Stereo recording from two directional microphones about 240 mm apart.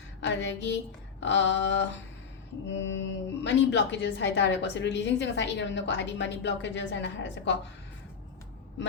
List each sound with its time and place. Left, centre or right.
0.2 s a woman's voice: left